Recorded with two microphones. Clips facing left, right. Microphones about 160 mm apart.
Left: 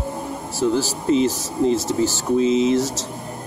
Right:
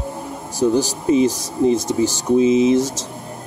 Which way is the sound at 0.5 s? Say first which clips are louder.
Right 3 dB; 15° right (ahead or behind).